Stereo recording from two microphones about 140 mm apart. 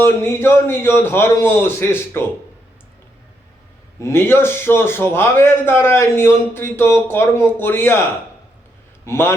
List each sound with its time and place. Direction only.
0.0 s a man's voice: 15° left (ahead or behind)
4.0 s a man's voice: 15° left (ahead or behind)
9.0 s a man's voice: 20° left (ahead or behind)